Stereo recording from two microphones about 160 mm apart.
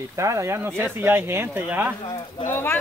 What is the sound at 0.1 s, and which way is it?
Speech, 20° right (ahead or behind).